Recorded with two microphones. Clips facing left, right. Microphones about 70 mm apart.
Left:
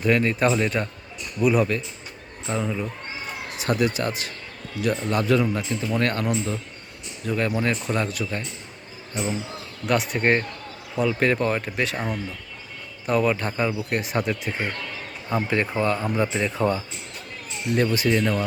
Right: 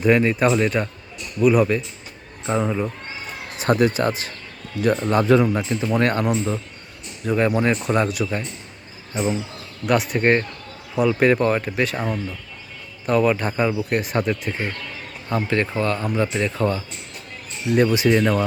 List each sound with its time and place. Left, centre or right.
0.0 s speech: centre
0.3 s speech: centre
2.5 s speech: right
3.6 s speech: right; by 8.4 s centre
9.8 s speech: centre
17.8 s speech: right